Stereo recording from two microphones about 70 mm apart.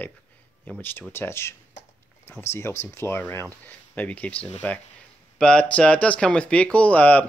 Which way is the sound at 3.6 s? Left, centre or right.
Left.